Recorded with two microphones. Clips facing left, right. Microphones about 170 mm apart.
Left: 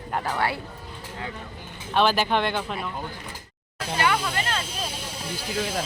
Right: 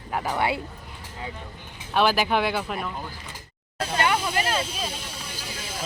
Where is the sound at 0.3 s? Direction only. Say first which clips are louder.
Right 3 dB; 20° right (ahead or behind).